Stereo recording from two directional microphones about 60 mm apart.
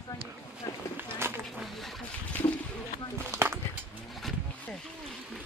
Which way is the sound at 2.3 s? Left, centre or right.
Left.